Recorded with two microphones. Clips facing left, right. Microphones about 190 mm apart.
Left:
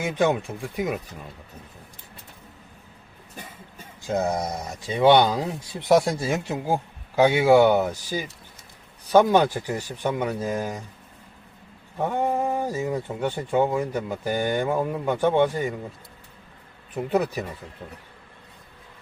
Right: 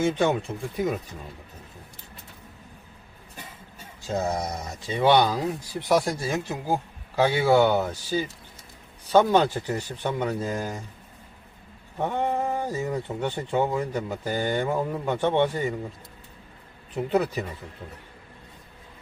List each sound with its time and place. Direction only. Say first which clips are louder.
0.0 s speech: even; 10° left (ahead or behind)
4.0 s speech: left 2 dB; 15° left (ahead or behind)
11.9 s speech: left 2 dB; 10° left (ahead or behind)
16.9 s speech: even; 10° left (ahead or behind)